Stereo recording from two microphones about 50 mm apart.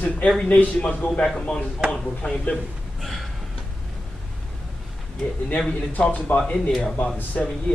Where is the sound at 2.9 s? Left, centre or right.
Centre.